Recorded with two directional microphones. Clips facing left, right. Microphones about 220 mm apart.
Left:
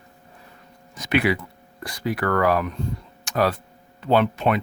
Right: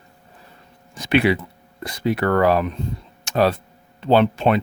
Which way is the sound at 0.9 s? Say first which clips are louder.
Right 4 dB; 30° right (ahead or behind).